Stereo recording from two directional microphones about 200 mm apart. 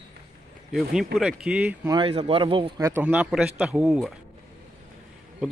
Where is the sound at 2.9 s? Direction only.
10° right (ahead or behind).